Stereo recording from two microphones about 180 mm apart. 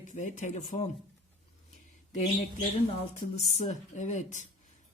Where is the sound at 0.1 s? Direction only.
40° left (ahead or behind).